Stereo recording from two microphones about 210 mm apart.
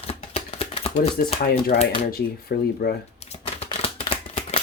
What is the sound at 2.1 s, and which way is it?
Speech, 45° left (ahead or behind).